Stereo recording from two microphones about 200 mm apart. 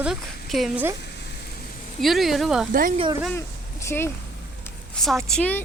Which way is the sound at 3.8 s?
10° left (ahead or behind).